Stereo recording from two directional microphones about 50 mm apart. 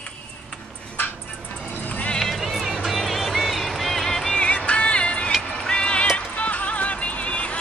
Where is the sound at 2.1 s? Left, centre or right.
Centre.